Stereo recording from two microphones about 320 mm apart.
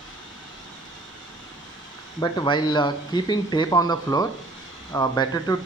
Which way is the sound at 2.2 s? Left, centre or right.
Centre.